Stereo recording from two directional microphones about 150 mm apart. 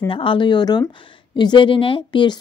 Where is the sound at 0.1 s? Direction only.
35° left (ahead or behind).